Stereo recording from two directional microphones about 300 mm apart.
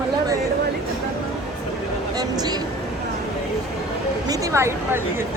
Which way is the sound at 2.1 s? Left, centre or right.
Centre.